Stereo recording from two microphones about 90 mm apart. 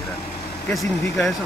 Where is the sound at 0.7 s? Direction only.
Centre (ahead or behind).